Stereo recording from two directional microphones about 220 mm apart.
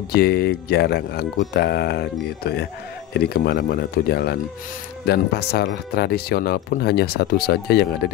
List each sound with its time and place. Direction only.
0.1 s speech: 45° left (ahead or behind)